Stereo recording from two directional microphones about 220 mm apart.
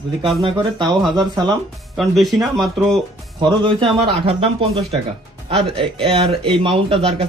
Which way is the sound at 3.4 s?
20° right (ahead or behind).